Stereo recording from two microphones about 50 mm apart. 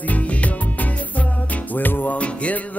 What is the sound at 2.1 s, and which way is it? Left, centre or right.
Music, left.